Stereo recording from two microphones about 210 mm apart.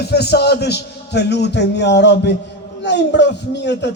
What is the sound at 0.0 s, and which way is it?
A man's voice, 50° left (ahead or behind).